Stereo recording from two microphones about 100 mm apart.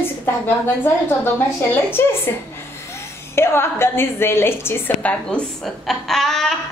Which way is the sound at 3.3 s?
25° left (ahead or behind).